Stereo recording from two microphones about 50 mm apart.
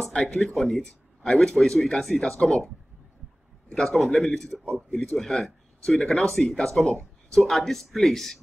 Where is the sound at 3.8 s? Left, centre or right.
Centre.